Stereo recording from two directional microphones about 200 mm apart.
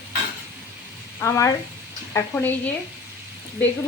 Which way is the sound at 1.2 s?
15° left (ahead or behind).